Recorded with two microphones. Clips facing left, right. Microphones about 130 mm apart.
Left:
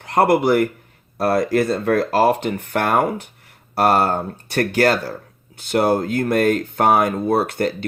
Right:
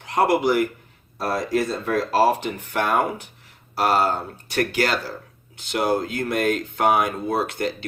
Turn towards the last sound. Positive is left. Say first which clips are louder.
# left 5 dB
turn(degrees=50)  # may be behind; listen again after turning